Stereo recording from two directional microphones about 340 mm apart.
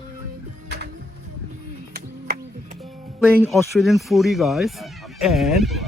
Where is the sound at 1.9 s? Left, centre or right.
Right.